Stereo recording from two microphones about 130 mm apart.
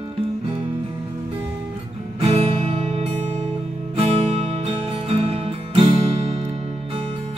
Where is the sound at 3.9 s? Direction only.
50° right (ahead or behind).